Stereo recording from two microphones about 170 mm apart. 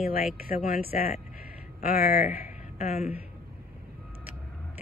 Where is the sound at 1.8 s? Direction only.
55° left (ahead or behind).